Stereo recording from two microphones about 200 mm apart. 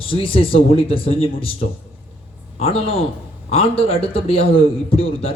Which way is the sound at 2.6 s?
30° left (ahead or behind).